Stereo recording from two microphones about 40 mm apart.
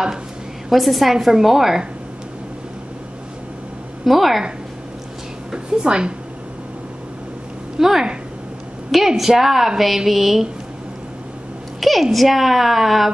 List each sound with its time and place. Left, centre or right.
0.7 s speech: centre
4.0 s speech: centre
5.5 s a woman's voice: right
7.8 s a woman's voice: centre
11.8 s speech: centre